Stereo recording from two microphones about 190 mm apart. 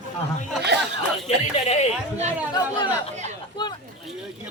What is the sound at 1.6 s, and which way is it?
Speech, 35° left (ahead or behind).